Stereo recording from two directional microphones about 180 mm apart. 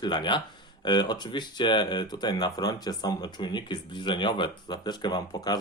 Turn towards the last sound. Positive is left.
turn(degrees=20)  # may be behind; listen again after turning